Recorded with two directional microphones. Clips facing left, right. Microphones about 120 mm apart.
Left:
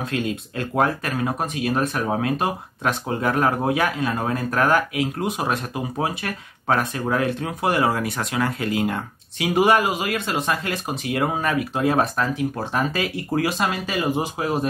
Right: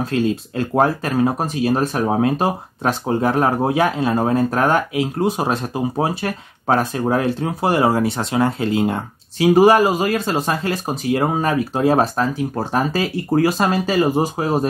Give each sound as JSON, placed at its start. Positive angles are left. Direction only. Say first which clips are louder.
{"t": 0.0, "sound": "speech", "louder": "right 6 dB", "side_deg": -35}